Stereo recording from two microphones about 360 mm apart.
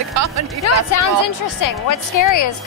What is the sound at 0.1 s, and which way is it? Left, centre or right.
Music, right.